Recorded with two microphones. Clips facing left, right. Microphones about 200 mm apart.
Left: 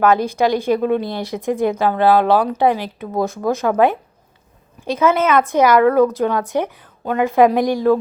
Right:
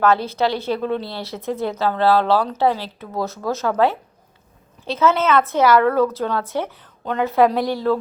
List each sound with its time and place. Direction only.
0.0 s a woman's voice: 15° left (ahead or behind)